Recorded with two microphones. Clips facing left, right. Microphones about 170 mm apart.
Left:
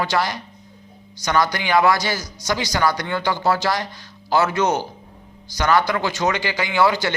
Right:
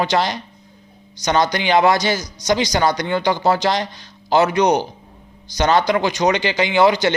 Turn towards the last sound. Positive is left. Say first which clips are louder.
# right 4 dB
turn(degrees=-20)  # may be behind; listen again after turning